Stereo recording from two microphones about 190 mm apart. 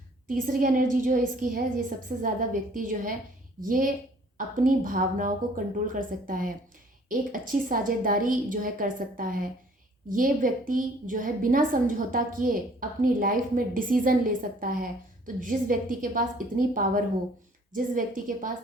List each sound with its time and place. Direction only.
0.3 s a woman's voice: 45° right (ahead or behind)